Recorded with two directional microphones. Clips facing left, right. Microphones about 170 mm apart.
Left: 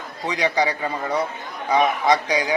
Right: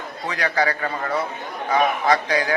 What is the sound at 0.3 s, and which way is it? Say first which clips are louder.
A man's voice: left 1 dB; 15° left (ahead or behind).